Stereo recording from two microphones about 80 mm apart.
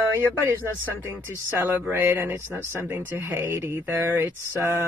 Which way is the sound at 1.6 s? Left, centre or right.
Right.